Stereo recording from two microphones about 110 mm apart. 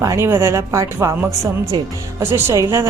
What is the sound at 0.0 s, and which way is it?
Speech, 25° right (ahead or behind).